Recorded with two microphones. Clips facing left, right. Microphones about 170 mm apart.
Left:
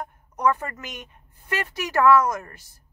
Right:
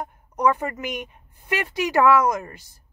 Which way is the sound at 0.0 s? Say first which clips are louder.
Right 2 dB; 15° right (ahead or behind).